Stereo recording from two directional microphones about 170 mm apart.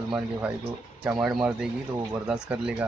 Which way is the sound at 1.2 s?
5° right (ahead or behind).